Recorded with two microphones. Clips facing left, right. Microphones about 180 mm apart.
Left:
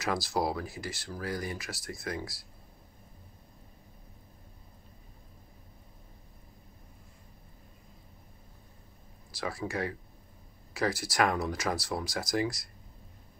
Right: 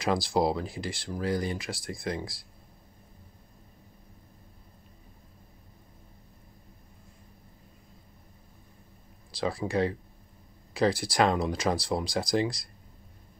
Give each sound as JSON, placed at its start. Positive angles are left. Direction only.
{"t": 0.0, "sound": "speech", "side_deg": -30}
{"t": 9.4, "sound": "speech", "side_deg": -30}